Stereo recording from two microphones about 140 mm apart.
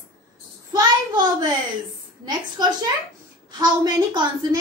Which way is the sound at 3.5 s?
30° right (ahead or behind).